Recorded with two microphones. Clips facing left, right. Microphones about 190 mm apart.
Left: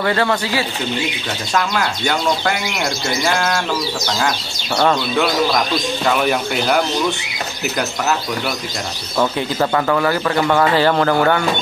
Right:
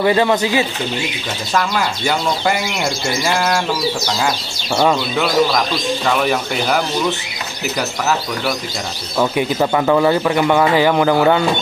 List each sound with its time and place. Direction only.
0.0 s speech: 15° right (ahead or behind)
1.5 s speech: 5° right (ahead or behind)
4.7 s speech: 5° right (ahead or behind)
9.2 s speech: 10° right (ahead or behind)